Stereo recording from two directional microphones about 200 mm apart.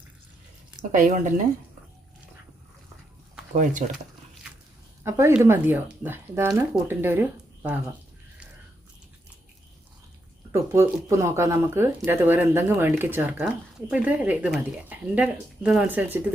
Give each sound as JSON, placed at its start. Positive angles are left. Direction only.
{"t": 0.8, "sound": "speech", "side_deg": -40}
{"t": 3.6, "sound": "speech", "side_deg": -40}
{"t": 5.0, "sound": "speech", "side_deg": -15}
{"t": 10.5, "sound": "speech", "side_deg": -15}